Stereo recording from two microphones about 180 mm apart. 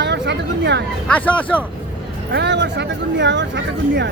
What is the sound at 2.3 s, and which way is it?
Speech, 75° right (ahead or behind).